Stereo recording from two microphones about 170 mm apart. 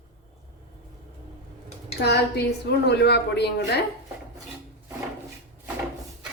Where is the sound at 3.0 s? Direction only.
80° left.